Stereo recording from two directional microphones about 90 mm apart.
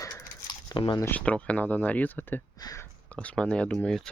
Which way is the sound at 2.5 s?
45° left (ahead or behind).